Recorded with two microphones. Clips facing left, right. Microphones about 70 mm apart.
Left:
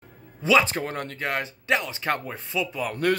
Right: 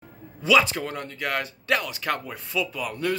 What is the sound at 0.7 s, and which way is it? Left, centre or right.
Speech, left.